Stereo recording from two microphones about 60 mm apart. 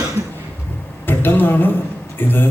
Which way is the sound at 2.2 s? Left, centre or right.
Left.